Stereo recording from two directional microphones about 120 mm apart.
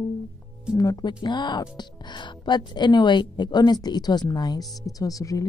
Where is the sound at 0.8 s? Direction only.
30° left (ahead or behind).